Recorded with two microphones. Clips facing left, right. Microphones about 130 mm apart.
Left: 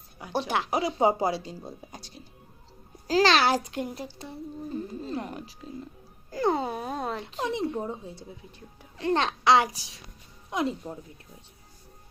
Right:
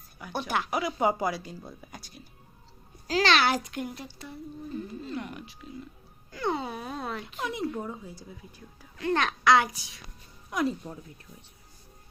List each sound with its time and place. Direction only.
0.2 s a child's voice: 30° left (ahead or behind)